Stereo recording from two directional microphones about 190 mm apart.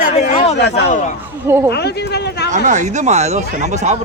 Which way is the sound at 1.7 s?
60° left (ahead or behind).